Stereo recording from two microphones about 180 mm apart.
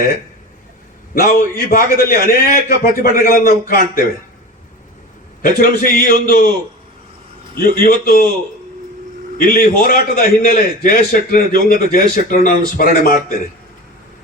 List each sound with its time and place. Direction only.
1.1 s a man's voice: 50° left (ahead or behind)
5.4 s a man's voice: 50° left (ahead or behind)
7.5 s a man's voice: 55° left (ahead or behind)
9.4 s a man's voice: 55° left (ahead or behind)